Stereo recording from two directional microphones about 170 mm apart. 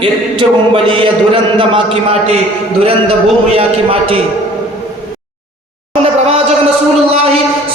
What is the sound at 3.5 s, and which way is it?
Speech, 35° right (ahead or behind).